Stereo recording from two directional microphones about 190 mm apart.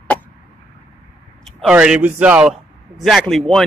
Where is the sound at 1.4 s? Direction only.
5° right (ahead or behind).